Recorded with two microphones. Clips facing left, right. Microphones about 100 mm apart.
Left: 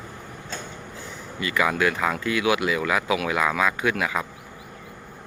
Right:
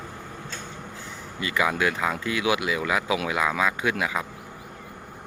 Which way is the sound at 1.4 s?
20° right (ahead or behind).